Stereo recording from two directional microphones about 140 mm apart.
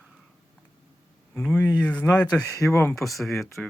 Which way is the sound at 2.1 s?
10° left (ahead or behind).